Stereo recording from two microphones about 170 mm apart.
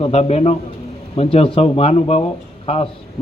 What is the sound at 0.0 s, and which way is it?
Speech, 40° left (ahead or behind).